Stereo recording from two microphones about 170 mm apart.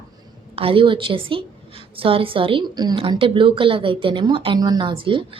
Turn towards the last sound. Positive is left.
turn(degrees=-30)  # may be behind; listen again after turning